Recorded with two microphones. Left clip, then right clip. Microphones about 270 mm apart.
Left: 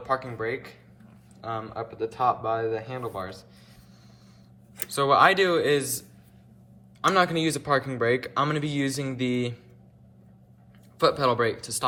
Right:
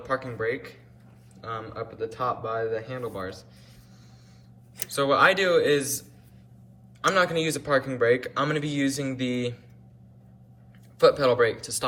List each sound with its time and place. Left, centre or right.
0.0 s speech: centre
4.9 s speech: centre
7.1 s speech: centre
10.9 s speech: centre